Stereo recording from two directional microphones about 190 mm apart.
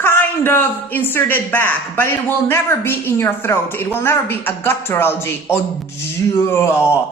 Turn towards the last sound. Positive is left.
turn(degrees=15)  # may be behind; listen again after turning